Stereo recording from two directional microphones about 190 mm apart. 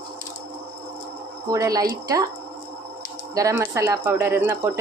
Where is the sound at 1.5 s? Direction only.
20° right (ahead or behind).